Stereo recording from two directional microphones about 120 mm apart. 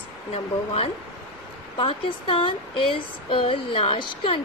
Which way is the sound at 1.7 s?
45° left (ahead or behind).